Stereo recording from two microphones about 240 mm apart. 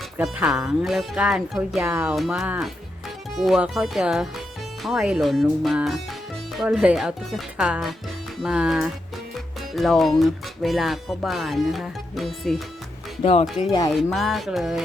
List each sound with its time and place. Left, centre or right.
0.2 s speech: centre
13.2 s speech: left
13.9 s speech: centre